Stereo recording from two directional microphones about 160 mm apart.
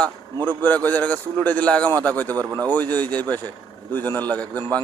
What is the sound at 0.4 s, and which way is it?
A man's voice, 10° left (ahead or behind).